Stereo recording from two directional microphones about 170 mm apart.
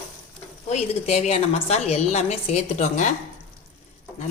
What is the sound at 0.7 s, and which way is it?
A woman's voice, 40° left (ahead or behind).